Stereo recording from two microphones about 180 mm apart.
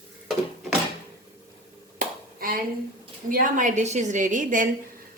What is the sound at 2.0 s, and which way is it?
Clapping, 55° right (ahead or behind).